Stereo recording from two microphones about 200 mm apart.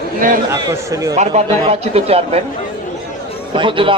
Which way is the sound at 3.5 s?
25° right (ahead or behind).